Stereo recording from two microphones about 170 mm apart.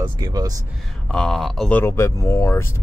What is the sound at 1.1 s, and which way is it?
Speech, 5° left (ahead or behind).